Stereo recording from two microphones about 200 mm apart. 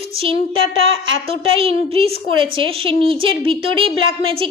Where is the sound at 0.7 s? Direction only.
75° right (ahead or behind).